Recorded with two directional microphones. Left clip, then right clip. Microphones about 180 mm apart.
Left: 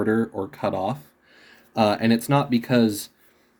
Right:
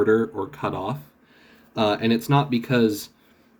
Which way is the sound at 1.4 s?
55° left (ahead or behind).